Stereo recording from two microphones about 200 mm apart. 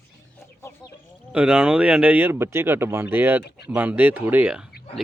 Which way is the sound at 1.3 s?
5° right (ahead or behind).